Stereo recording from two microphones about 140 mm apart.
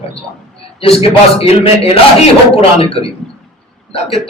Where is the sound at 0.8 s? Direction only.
45° left (ahead or behind).